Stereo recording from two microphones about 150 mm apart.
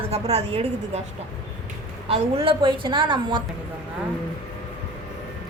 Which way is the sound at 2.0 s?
40° right (ahead or behind).